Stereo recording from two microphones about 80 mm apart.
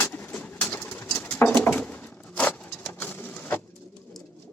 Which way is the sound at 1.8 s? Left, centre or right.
Centre.